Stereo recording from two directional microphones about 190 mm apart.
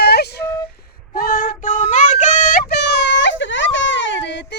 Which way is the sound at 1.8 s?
40° left (ahead or behind).